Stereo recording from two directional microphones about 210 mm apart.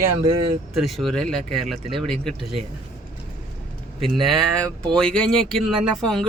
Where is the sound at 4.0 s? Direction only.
Centre (ahead or behind).